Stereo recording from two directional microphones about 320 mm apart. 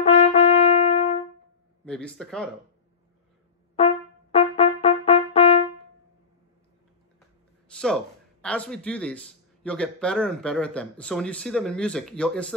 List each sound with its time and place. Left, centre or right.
0.0 s brass instrument: centre
1.9 s a man's voice: centre
3.7 s trumpet: centre
7.7 s a man's voice: centre